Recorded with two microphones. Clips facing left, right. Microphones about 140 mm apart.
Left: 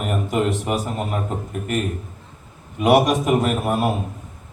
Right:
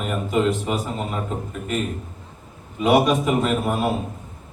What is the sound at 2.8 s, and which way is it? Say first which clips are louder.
A man's voice: left 1 dB; 55° left (ahead or behind).